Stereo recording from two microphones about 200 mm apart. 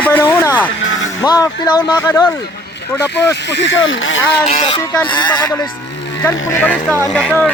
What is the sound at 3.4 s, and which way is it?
Speech, 60° left (ahead or behind).